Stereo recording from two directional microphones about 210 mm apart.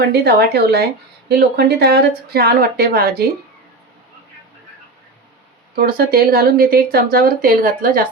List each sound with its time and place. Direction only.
0.0 s speech: 50° right (ahead or behind)
5.7 s speech: 45° right (ahead or behind)